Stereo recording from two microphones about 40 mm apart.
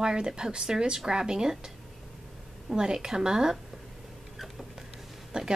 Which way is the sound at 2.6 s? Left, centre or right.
Centre.